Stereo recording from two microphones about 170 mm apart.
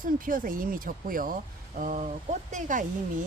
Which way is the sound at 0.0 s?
55° right (ahead or behind).